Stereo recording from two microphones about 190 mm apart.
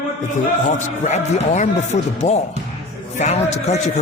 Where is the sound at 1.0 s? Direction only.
40° left (ahead or behind).